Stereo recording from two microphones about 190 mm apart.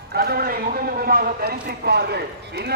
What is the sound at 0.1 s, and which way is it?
A man's voice, 55° right (ahead or behind).